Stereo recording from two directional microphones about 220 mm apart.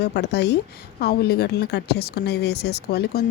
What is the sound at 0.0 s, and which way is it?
A woman's voice, 50° left (ahead or behind).